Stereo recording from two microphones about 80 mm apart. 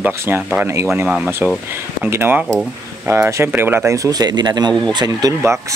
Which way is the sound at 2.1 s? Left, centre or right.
Right.